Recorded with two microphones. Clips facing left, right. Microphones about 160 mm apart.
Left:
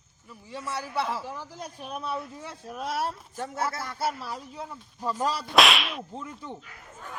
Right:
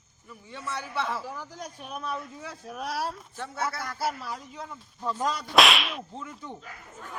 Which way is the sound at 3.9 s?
Centre (ahead or behind).